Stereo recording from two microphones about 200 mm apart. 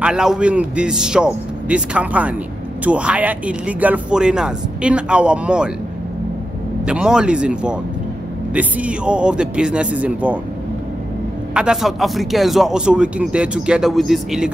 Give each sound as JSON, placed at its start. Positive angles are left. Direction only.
{"t": 0.0, "sound": "speech", "side_deg": -5}
{"t": 6.9, "sound": "speech", "side_deg": -5}
{"t": 11.5, "sound": "speech", "side_deg": -5}